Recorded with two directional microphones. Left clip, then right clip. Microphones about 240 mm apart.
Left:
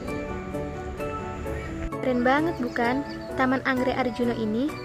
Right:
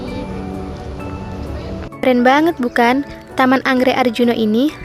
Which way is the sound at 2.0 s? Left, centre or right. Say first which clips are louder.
Right 11 dB; right.